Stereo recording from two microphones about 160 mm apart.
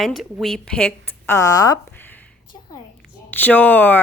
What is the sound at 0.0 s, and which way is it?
A woman's voice, centre (ahead or behind).